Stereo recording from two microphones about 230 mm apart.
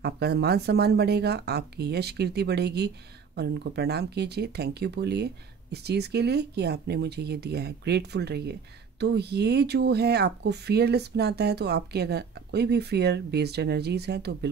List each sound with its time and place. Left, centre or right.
0.0 s speech: right